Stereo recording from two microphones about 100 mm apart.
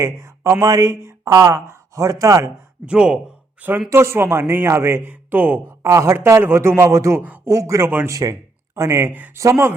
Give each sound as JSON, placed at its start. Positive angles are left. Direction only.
{"t": 0.0, "sound": "a man's voice", "side_deg": -30}
{"t": 2.8, "sound": "a man's voice", "side_deg": -10}
{"t": 7.5, "sound": "speech", "side_deg": -30}
{"t": 7.9, "sound": "a man's voice", "side_deg": -20}
{"t": 8.1, "sound": "a man's voice", "side_deg": -35}